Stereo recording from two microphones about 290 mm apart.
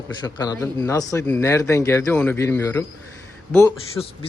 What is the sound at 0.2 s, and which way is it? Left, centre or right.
Speech, centre.